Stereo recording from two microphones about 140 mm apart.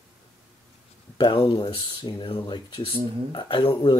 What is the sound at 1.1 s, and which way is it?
Speech, 35° left (ahead or behind).